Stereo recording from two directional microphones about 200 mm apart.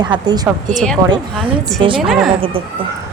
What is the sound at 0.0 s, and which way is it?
Speech, 20° right (ahead or behind).